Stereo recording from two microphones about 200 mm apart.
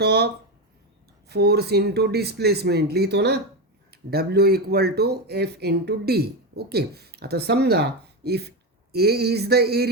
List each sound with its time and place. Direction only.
0.0 s speech: 55° right (ahead or behind)
1.3 s speech: 55° right (ahead or behind)